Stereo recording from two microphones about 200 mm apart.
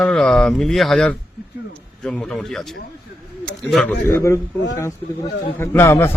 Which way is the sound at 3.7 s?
5° left (ahead or behind).